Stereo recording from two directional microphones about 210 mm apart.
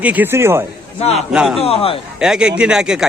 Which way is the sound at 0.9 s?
30° left (ahead or behind).